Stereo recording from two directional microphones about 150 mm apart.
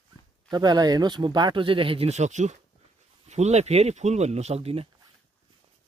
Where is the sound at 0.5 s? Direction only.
30° right (ahead or behind).